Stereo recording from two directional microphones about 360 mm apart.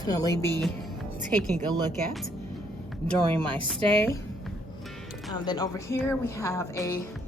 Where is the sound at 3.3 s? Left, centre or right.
Centre.